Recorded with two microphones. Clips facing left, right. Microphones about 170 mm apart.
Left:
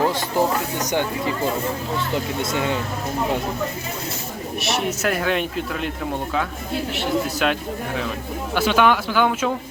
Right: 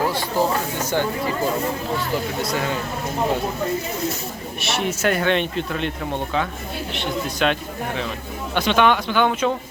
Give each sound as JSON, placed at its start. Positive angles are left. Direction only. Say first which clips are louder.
{"t": 0.0, "sound": "speech", "louder": "left 1 dB", "side_deg": 20}
{"t": 2.4, "sound": "speech", "louder": "left 1 dB", "side_deg": 25}
{"t": 4.6, "sound": "speech", "louder": "right 1 dB", "side_deg": 0}
{"t": 6.9, "sound": "speech", "louder": "left 3 dB", "side_deg": 5}
{"t": 8.5, "sound": "speech", "louder": "even", "side_deg": 5}